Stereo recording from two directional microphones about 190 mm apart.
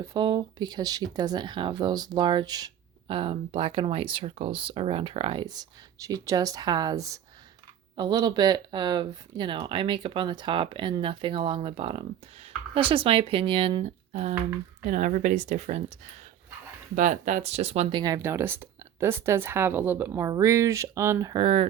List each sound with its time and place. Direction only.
0.0 s speech: 20° right (ahead or behind); by 15.8 s 40° right (ahead or behind)
16.9 s speech: 45° right (ahead or behind)
18.0 s speech: 15° right (ahead or behind)